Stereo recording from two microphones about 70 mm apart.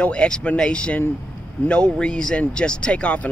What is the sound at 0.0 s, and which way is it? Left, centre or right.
Speech, centre.